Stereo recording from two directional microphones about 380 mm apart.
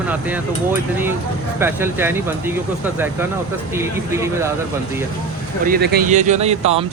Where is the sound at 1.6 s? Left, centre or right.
Centre.